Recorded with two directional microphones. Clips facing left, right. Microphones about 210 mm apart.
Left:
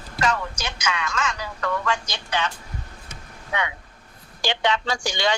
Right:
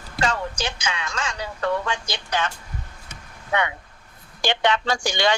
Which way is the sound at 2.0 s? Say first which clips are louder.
Right 1 dB; 50° right (ahead or behind).